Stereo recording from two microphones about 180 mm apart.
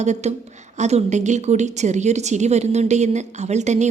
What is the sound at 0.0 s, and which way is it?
A woman's voice, 40° right (ahead or behind).